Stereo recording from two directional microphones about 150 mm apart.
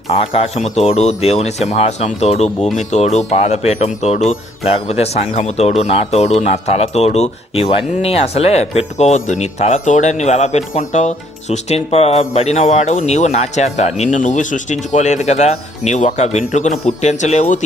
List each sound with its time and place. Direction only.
0.5 s speech: 45° left (ahead or behind)